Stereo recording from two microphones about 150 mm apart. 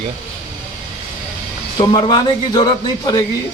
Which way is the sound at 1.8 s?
30° left (ahead or behind).